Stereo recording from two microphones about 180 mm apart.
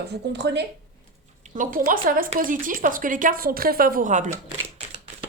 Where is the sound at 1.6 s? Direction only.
50° right (ahead or behind).